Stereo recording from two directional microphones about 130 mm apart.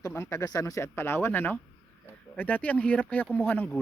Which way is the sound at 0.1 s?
20° left (ahead or behind).